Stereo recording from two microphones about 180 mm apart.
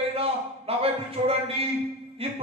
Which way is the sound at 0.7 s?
35° right (ahead or behind).